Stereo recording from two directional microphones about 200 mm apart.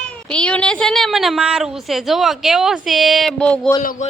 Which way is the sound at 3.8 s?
45° left (ahead or behind).